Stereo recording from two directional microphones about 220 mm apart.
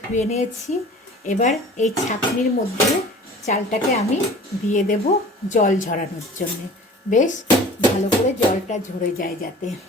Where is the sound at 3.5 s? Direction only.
30° left (ahead or behind).